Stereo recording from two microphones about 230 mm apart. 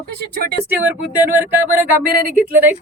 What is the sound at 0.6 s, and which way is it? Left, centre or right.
Speech, centre.